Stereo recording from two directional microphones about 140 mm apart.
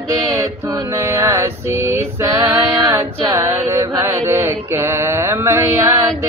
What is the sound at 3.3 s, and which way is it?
Mantra, 20° right (ahead or behind).